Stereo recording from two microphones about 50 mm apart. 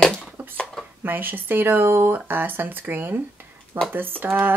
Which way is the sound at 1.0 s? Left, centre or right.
Right.